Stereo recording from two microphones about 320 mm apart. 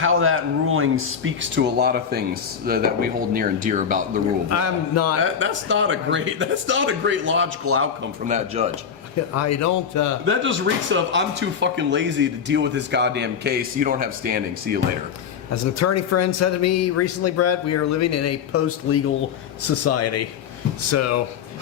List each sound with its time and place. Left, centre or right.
0.0 s speech: right
4.4 s speech: left
5.2 s speech: right
8.3 s speech: centre
9.3 s a man's voice: left
10.2 s speech: right
15.6 s speech: left